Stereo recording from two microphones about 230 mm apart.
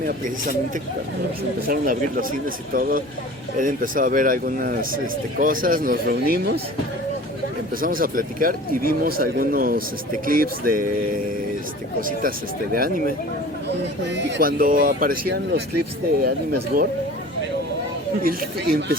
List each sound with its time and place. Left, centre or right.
1.6 s speech: right
7.8 s speech: right
11.9 s speech: right
14.2 s speech: right
18.2 s speech: right